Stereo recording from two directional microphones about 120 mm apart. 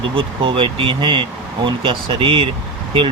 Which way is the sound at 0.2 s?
45° right (ahead or behind).